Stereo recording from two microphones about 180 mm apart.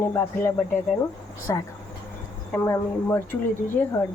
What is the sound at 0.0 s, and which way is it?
A woman's voice, 15° left (ahead or behind).